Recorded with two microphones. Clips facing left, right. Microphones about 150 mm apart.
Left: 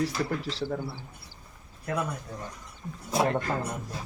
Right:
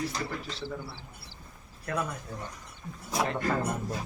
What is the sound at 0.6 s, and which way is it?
Speech, 50° left (ahead or behind).